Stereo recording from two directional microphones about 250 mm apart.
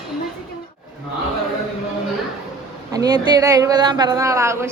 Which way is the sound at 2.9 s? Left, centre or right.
Centre.